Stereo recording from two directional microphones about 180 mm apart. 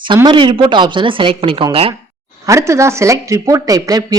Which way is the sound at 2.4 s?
15° right (ahead or behind).